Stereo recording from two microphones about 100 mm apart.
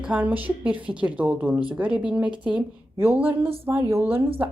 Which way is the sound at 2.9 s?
20° right (ahead or behind).